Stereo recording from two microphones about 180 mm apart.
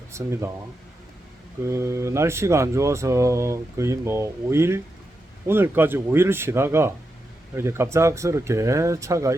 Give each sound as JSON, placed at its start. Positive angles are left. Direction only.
{"t": 0.1, "sound": "speech", "side_deg": -15}
{"t": 1.6, "sound": "speech", "side_deg": -15}